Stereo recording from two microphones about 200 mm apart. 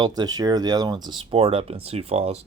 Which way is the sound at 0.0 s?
20° right (ahead or behind).